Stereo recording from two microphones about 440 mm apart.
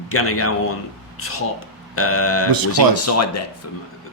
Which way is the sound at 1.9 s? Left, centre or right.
Left.